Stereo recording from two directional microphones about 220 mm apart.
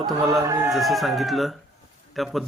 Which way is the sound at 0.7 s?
Centre (ahead or behind).